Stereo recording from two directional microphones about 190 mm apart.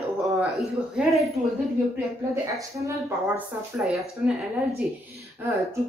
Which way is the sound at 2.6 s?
15° right (ahead or behind).